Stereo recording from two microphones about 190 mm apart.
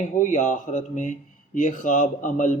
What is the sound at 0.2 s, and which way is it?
Speech, 40° left (ahead or behind).